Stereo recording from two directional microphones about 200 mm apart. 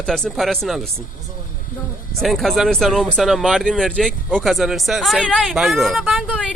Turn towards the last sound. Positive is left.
turn(degrees=0)  # may be behind; listen again after turning